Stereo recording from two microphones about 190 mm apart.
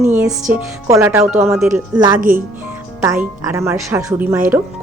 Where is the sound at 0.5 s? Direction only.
10° right (ahead or behind).